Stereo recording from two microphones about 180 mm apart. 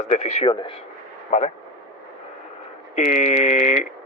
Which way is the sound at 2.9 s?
40° left (ahead or behind).